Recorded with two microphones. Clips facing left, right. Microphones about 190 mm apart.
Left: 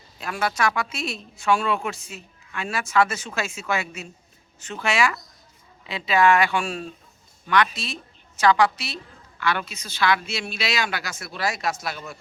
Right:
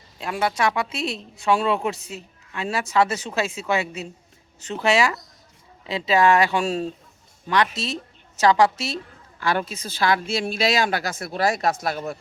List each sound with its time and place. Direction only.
0.2 s speech: 20° right (ahead or behind)
2.0 s a sound: 35° right (ahead or behind)
2.6 s speech: 35° right (ahead or behind)
10.5 s speech: 45° right (ahead or behind)